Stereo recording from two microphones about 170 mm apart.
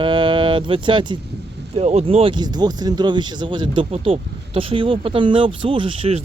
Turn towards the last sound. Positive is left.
turn(degrees=-30)  # may be behind; listen again after turning